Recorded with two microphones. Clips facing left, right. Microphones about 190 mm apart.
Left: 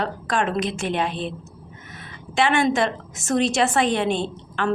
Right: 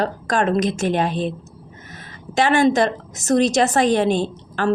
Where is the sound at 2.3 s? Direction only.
40° right (ahead or behind).